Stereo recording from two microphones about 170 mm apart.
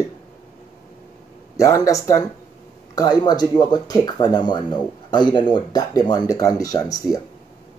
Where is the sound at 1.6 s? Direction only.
20° left (ahead or behind).